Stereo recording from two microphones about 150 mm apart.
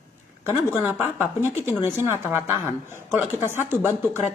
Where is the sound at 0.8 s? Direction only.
15° right (ahead or behind).